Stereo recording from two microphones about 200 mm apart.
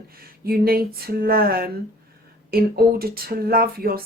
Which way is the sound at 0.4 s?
50° right (ahead or behind).